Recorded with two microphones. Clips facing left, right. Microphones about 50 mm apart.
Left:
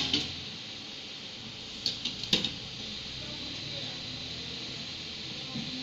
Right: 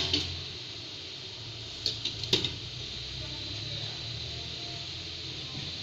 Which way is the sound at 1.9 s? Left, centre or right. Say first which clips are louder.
Right 1 dB; left.